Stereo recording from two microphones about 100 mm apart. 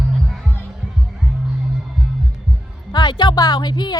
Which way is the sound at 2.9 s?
50° left (ahead or behind).